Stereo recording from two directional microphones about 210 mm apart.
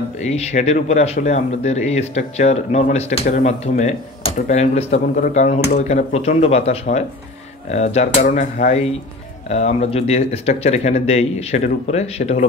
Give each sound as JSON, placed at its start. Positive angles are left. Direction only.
{"t": 0.2, "sound": "speech", "side_deg": 30}